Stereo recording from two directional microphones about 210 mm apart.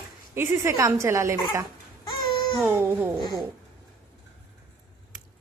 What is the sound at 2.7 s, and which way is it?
Speech, 10° right (ahead or behind).